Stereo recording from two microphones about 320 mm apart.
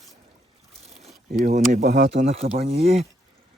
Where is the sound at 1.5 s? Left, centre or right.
Right.